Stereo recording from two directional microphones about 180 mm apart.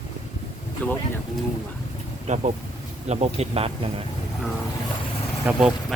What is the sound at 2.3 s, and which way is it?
Speech, 40° right (ahead or behind).